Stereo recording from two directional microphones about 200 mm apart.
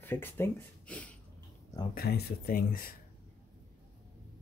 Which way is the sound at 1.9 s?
50° left (ahead or behind).